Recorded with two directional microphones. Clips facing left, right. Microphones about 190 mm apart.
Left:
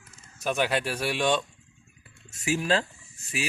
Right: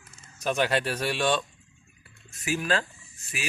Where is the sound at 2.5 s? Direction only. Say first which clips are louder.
Left 2 dB; 25° left (ahead or behind).